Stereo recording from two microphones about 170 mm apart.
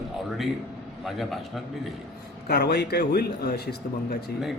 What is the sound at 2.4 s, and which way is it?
A man's voice, 70° left (ahead or behind).